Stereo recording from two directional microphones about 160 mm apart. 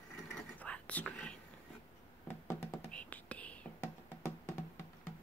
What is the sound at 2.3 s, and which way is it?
Music, 20° left (ahead or behind).